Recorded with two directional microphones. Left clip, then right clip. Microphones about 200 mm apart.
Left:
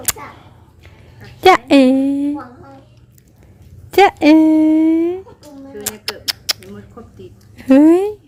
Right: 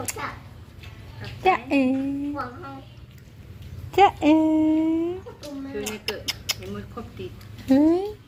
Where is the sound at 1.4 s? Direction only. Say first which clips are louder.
Left 11 dB; 55° left (ahead or behind).